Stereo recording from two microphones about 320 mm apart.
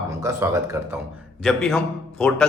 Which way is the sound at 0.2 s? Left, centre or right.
Centre.